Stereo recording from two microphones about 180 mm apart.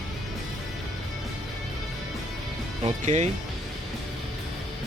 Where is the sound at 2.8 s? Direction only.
40° right (ahead or behind).